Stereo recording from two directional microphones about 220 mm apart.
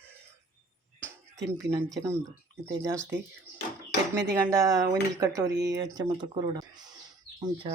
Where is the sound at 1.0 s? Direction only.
15° right (ahead or behind).